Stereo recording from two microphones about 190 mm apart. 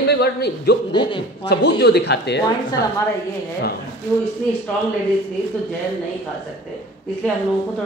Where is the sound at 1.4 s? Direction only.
60° left (ahead or behind).